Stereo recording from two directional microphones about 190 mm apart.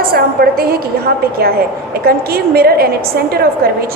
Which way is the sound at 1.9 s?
55° right (ahead or behind).